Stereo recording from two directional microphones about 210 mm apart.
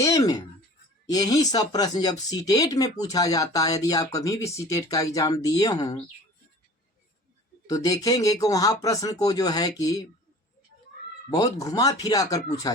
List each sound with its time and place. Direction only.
0.0 s a sound: 15° left (ahead or behind)
1.0 s speech: 20° left (ahead or behind)
7.7 s speech: 15° left (ahead or behind)
11.3 s speech: 15° left (ahead or behind)